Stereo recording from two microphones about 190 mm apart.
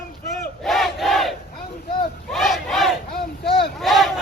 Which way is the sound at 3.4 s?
30° left (ahead or behind).